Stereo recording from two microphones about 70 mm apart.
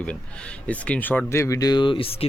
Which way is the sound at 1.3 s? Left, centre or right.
Left.